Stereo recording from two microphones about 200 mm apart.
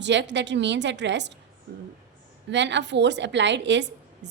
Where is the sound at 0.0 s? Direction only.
60° right (ahead or behind).